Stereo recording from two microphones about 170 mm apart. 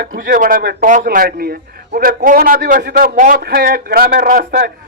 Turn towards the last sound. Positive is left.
turn(degrees=-60)  # may be behind; listen again after turning